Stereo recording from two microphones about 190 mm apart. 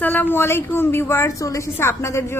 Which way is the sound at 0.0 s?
10° left (ahead or behind).